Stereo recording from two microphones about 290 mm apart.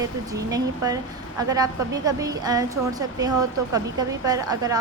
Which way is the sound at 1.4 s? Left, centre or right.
Centre.